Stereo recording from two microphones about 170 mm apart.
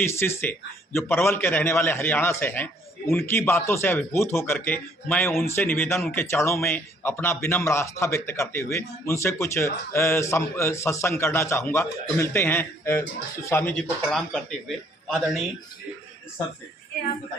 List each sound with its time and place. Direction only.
0.0 s speech: 15° left (ahead or behind)
14.1 s a man's voice: 5° left (ahead or behind)